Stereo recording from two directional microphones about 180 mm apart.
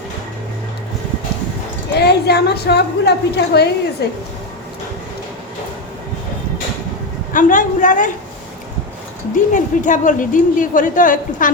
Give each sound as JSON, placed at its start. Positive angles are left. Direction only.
{"t": 2.0, "sound": "a woman's voice", "side_deg": 65}
{"t": 7.3, "sound": "speech", "side_deg": 45}
{"t": 9.3, "sound": "speech", "side_deg": 45}